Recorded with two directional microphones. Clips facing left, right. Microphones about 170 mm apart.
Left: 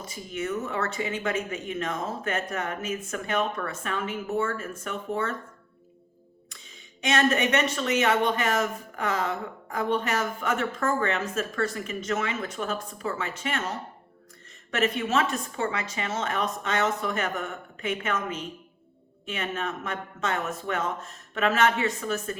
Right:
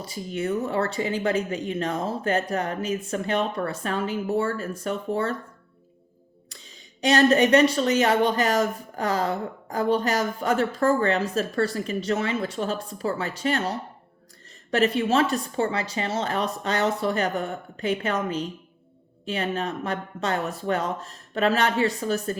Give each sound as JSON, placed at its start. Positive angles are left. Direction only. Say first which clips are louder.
{"t": 0.0, "sound": "speech", "louder": "right 4 dB", "side_deg": -35}
{"t": 6.5, "sound": "speech", "louder": "right 3 dB", "side_deg": -35}